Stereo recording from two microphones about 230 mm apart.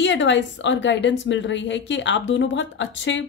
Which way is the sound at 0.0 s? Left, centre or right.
Left.